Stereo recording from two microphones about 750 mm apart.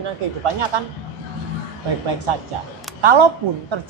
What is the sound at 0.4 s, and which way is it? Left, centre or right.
Speech, right.